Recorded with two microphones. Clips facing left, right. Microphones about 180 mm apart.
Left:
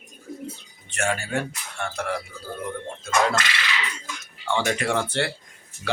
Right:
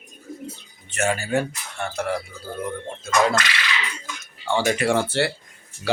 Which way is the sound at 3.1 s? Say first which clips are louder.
Right 2 dB; 5° right (ahead or behind).